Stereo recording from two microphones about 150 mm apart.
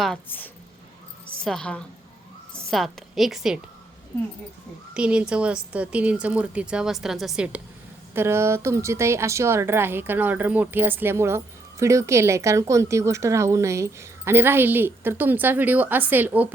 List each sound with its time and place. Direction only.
0.3 s a woman's voice: 10° left (ahead or behind); by 3.6 s 5° right (ahead or behind)
4.9 s a woman's voice: 5° right (ahead or behind)